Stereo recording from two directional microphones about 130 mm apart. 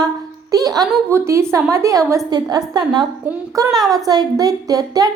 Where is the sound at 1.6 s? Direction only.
25° right (ahead or behind).